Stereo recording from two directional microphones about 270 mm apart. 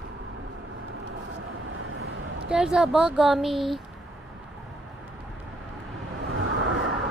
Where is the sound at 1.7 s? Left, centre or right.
Right.